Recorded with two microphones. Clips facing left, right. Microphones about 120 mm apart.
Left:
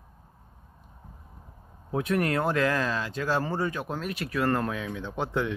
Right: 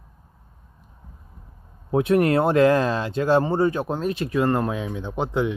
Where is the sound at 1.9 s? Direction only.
30° right (ahead or behind).